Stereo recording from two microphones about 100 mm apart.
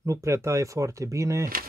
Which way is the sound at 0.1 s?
30° right (ahead or behind).